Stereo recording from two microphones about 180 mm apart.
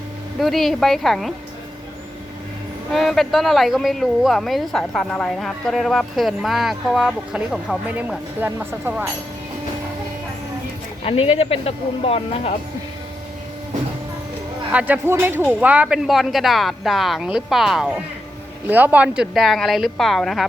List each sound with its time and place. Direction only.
0.3 s speech: centre (ahead or behind)
2.9 s speech: centre (ahead or behind)
11.0 s speech: 35° left (ahead or behind)
14.7 s a man's voice: 10° right (ahead or behind)